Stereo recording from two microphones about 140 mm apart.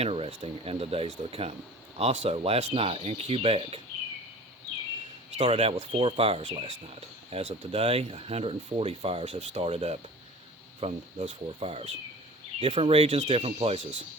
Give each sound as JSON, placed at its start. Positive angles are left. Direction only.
{"t": 0.0, "sound": "speech", "side_deg": -45}
{"t": 5.4, "sound": "speech", "side_deg": -45}